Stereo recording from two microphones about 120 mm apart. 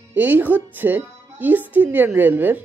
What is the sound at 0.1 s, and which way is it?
A woman's voice, 15° right (ahead or behind).